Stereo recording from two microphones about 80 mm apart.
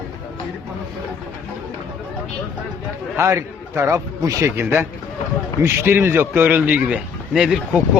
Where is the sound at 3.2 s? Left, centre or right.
Right.